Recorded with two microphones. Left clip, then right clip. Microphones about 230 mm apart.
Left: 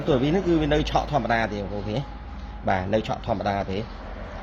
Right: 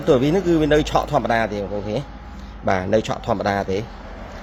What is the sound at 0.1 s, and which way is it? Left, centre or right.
A man's voice, right.